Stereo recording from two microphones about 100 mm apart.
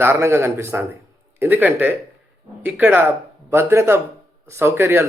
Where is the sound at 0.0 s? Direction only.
25° right (ahead or behind).